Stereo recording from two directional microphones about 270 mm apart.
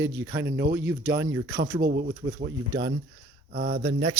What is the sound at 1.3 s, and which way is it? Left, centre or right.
Speech, right.